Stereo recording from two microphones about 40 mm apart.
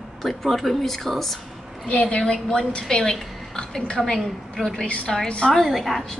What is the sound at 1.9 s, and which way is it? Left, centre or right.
A woman's voice, left.